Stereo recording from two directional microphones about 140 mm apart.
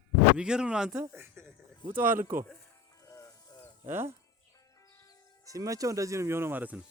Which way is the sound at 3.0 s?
20° left (ahead or behind).